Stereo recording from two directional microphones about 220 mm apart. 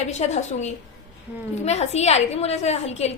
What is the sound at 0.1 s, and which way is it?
A woman's voice, 30° left (ahead or behind).